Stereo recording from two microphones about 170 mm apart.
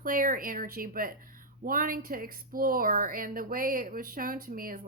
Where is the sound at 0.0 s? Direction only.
55° right (ahead or behind).